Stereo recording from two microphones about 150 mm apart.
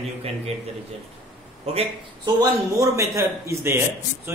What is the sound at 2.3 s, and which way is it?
A man's voice, 20° right (ahead or behind).